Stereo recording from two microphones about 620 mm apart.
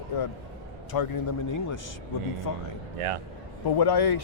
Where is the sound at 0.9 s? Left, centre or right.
Left.